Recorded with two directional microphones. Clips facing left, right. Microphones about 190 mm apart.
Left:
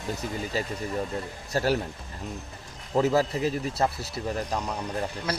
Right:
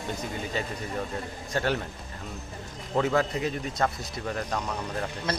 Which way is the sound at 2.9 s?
5° left (ahead or behind).